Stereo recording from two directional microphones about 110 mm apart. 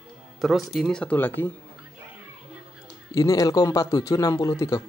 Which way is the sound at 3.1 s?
30° left (ahead or behind).